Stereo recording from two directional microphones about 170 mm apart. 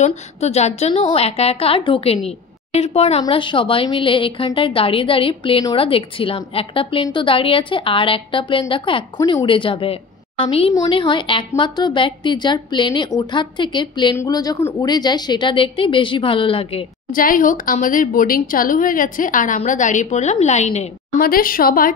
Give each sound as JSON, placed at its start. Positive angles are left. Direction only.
{"t": 0.0, "sound": "a woman's voice", "side_deg": 40}
{"t": 17.1, "sound": "a woman's voice", "side_deg": 55}
{"t": 21.2, "sound": "a woman's voice", "side_deg": 60}